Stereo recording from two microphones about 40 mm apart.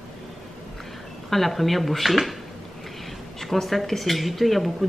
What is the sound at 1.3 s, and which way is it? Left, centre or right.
Speech, centre.